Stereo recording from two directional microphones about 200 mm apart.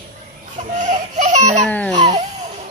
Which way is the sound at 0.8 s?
35° right (ahead or behind).